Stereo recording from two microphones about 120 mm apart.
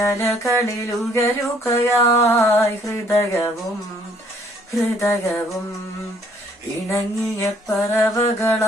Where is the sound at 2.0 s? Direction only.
25° left (ahead or behind).